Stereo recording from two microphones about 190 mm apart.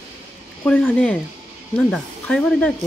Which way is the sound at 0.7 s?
5° left (ahead or behind).